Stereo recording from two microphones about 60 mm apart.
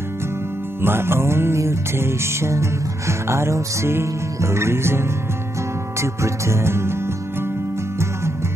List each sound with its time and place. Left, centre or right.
0.8 s music: right